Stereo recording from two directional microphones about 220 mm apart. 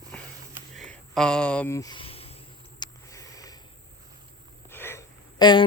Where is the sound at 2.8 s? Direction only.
15° left (ahead or behind).